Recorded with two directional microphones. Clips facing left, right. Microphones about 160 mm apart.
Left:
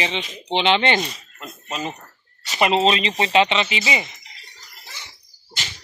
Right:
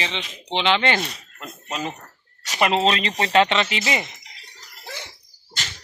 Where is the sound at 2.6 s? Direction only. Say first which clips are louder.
Left 2 dB; 20° left (ahead or behind).